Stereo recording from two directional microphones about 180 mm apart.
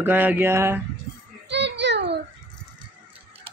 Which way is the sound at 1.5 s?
75° right (ahead or behind).